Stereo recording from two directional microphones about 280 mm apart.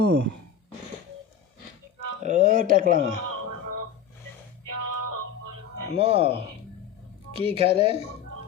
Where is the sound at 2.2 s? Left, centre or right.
Right.